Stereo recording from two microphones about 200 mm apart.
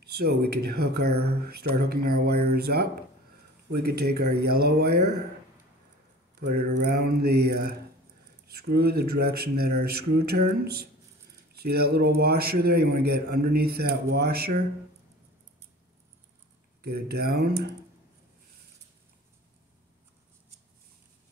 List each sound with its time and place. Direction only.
0.0 s a man's voice: 50° right (ahead or behind)
6.4 s a man's voice: 45° right (ahead or behind)
8.5 s a man's voice: 50° right (ahead or behind)
16.8 s a man's voice: 50° right (ahead or behind)